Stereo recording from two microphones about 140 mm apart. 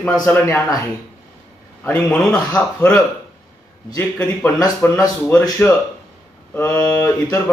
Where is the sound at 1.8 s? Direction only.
15° left (ahead or behind).